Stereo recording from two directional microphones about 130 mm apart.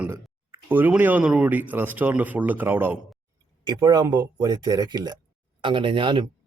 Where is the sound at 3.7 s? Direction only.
30° right (ahead or behind).